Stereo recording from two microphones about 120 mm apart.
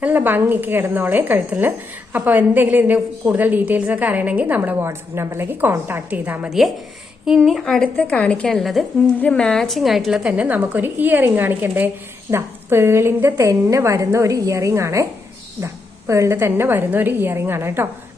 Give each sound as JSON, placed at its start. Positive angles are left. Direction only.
{"t": 0.0, "sound": "a woman's voice", "side_deg": -15}
{"t": 7.3, "sound": "a woman's voice", "side_deg": 0}